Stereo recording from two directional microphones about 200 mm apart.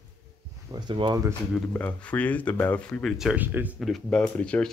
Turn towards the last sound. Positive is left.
turn(degrees=5)  # may be behind; listen again after turning